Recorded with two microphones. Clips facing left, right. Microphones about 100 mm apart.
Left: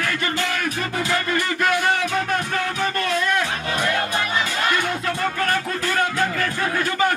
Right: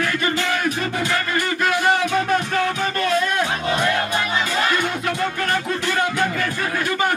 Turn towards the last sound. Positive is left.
turn(degrees=-15)  # may be behind; listen again after turning